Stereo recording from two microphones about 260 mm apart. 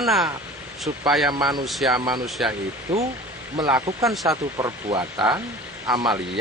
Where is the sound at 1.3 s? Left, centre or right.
Centre.